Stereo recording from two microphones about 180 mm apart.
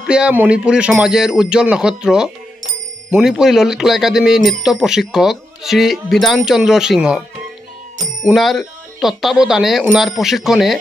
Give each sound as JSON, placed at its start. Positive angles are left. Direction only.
{"t": 0.0, "sound": "speech", "side_deg": -5}
{"t": 8.3, "sound": "speech", "side_deg": 0}